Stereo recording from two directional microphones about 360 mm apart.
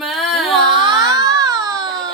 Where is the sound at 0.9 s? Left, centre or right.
Centre.